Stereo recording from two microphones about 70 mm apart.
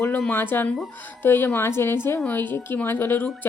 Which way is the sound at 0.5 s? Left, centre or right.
Left.